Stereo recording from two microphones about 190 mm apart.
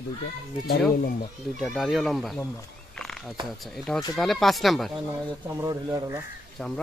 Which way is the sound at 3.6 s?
Centre (ahead or behind).